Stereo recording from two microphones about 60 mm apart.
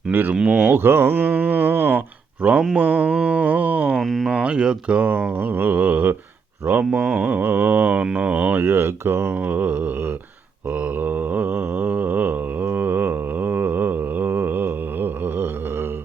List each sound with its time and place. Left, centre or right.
0.1 s speech: right
0.3 s speech: centre
0.7 s speech: right
2.7 s mantra: right
4.0 s speech: centre
4.3 s mantra: centre
8.0 s mantra: centre
8.6 s speech: right
10.7 s mantra: right